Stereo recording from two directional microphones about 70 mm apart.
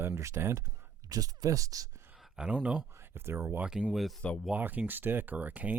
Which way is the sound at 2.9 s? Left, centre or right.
Right.